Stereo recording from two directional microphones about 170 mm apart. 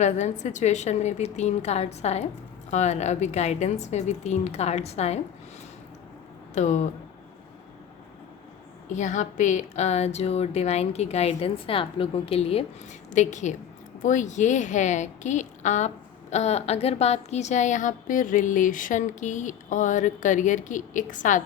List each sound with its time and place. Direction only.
0.0 s a woman's voice: 45° left (ahead or behind)
6.5 s speech: 45° left (ahead or behind)
8.9 s a woman's voice: 45° left (ahead or behind)